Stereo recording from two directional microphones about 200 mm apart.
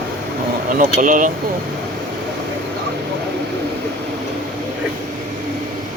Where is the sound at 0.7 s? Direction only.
40° right (ahead or behind).